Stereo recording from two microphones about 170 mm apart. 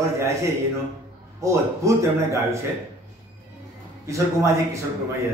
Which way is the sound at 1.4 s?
20° right (ahead or behind).